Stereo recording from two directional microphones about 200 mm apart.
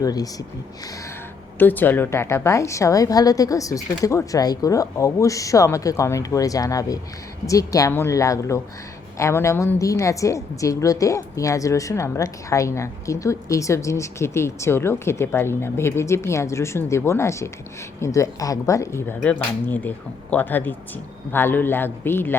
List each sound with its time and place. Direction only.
0.0 s speech: 20° left (ahead or behind)
1.5 s a woman's voice: 10° left (ahead or behind)